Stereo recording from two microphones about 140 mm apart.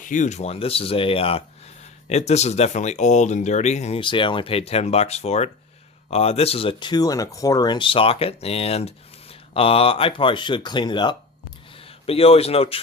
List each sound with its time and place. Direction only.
0.0 s speech: 65° left (ahead or behind)
4.0 s speech: 35° left (ahead or behind)
12.0 s speech: 45° left (ahead or behind)